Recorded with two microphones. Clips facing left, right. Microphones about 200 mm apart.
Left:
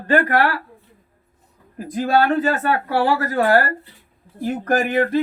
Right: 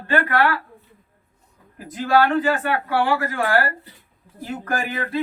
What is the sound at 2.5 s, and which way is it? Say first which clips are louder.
Speech: left 2 dB; 40° left (ahead or behind).